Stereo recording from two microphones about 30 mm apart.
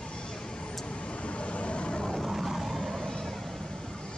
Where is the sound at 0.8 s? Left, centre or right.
Left.